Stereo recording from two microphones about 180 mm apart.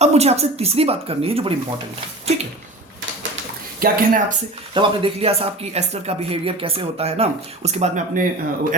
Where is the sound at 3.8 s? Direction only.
45° right (ahead or behind).